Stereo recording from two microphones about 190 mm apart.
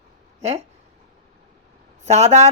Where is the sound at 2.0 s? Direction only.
35° right (ahead or behind).